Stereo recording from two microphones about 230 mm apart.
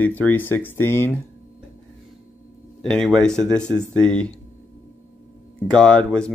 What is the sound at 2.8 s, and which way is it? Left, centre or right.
Speech, centre.